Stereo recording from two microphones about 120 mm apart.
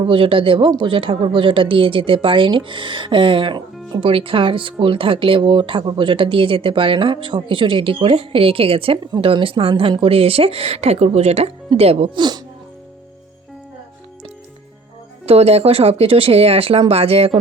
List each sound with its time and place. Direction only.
0.0 s speech: 45° right (ahead or behind)
12.1 s speech: 40° right (ahead or behind)
15.3 s speech: 60° right (ahead or behind)